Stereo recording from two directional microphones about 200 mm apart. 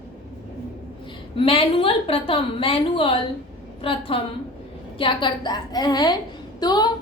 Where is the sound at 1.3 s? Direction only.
25° left (ahead or behind).